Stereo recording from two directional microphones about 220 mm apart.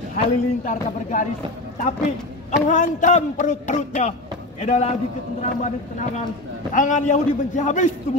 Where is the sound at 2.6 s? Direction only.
35° left (ahead or behind).